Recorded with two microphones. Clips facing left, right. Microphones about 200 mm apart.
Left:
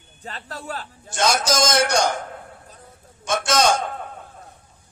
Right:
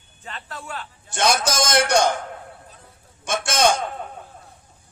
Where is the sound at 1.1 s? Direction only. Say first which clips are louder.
Even; 55° right (ahead or behind).